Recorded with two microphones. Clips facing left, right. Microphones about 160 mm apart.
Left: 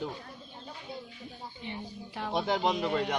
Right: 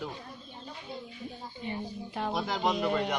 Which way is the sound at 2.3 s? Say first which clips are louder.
Left 3 dB; 30° left (ahead or behind).